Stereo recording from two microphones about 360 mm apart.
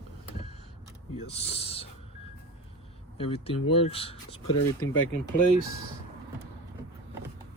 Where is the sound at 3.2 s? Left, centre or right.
Centre.